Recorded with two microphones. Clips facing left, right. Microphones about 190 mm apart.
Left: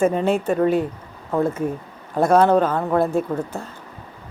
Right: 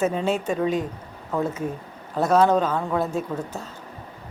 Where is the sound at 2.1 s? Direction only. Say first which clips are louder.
Left 3 dB; 10° left (ahead or behind).